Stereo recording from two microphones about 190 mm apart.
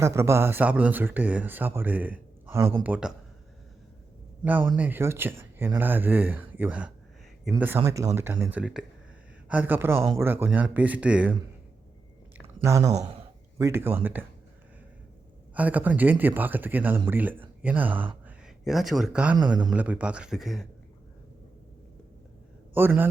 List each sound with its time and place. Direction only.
0.0 s speech: 15° right (ahead or behind)
4.8 s speech: 10° right (ahead or behind)
12.6 s speech: 15° right (ahead or behind)
15.5 s a man's voice: 10° right (ahead or behind)
22.7 s speech: 10° right (ahead or behind)